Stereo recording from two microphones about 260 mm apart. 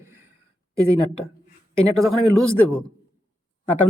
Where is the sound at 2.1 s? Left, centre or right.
Centre.